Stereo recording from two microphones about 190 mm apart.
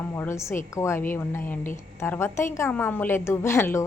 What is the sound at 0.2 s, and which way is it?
A woman's voice, 15° left (ahead or behind).